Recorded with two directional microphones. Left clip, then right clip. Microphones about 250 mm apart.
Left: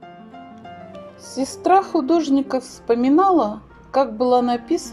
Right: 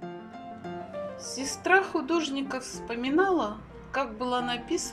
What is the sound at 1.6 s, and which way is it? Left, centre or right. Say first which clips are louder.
A woman's voice: left 8 dB; centre.